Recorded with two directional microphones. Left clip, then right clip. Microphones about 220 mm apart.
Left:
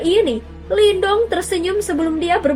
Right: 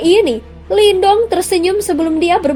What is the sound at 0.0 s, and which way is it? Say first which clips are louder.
A woman's voice: right 5 dB; 30° right (ahead or behind).